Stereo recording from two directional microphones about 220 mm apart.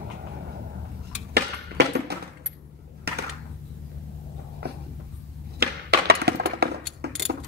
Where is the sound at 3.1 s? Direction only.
45° right (ahead or behind).